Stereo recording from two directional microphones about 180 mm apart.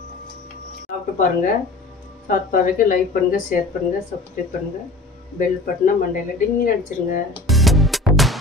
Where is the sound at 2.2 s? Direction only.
50° left (ahead or behind).